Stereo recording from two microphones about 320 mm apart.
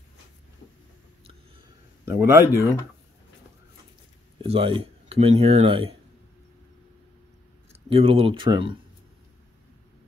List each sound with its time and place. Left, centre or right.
2.0 s a man's voice: centre
4.4 s speech: centre
7.7 s speech: centre